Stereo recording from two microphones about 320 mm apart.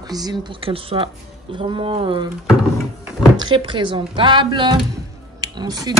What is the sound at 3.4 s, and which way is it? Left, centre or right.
Speech, centre.